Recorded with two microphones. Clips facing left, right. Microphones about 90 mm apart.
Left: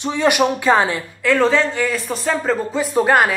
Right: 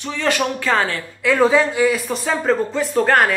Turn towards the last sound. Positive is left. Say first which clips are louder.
# left 1 dB
turn(degrees=10)  # may be behind; listen again after turning